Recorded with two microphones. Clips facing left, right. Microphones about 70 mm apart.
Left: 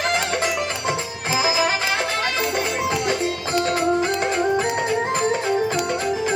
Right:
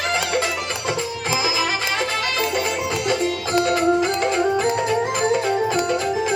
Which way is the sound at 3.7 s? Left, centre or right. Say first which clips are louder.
Right 1 dB; left.